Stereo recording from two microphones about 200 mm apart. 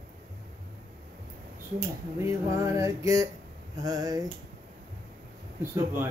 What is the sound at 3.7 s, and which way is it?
Speech, 20° right (ahead or behind).